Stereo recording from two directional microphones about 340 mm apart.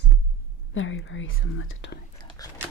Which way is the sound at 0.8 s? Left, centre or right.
Left.